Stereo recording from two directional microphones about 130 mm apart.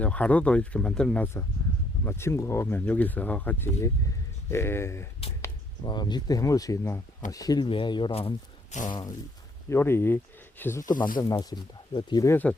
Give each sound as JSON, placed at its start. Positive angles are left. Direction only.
{"t": 0.0, "sound": "speech", "side_deg": 10}
{"t": 2.0, "sound": "speech", "side_deg": 20}
{"t": 5.8, "sound": "speech", "side_deg": 35}
{"t": 8.7, "sound": "speech", "side_deg": 75}
{"t": 9.6, "sound": "speech", "side_deg": 20}
{"t": 10.9, "sound": "speech", "side_deg": 90}
{"t": 11.2, "sound": "speech", "side_deg": 30}
{"t": 12.3, "sound": "speech", "side_deg": 10}